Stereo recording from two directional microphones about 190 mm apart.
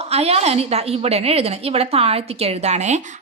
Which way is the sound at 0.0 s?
35° right (ahead or behind).